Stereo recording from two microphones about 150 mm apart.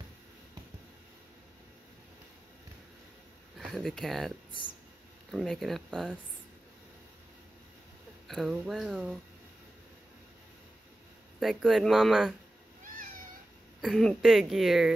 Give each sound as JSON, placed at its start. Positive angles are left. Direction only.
{"t": 3.5, "sound": "speech", "side_deg": 0}
{"t": 5.3, "sound": "speech", "side_deg": 0}
{"t": 8.3, "sound": "speech", "side_deg": 0}
{"t": 11.3, "sound": "speech", "side_deg": 0}
{"t": 13.7, "sound": "speech", "side_deg": 0}